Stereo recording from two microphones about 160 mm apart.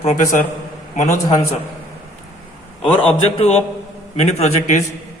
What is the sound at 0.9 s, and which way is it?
Speech, 45° left (ahead or behind).